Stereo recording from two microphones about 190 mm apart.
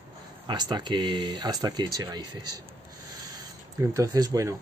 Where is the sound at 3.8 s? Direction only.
15° right (ahead or behind).